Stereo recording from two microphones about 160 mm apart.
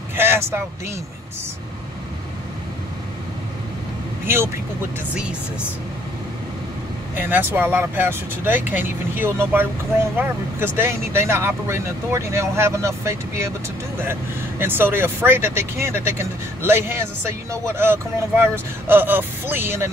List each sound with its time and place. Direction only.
0.1 s vehicle: 15° right (ahead or behind)
7.2 s speech: 10° right (ahead or behind)
14.6 s speech: 15° right (ahead or behind)